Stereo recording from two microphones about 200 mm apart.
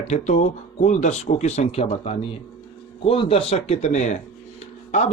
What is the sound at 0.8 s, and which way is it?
Speech, 35° left (ahead or behind).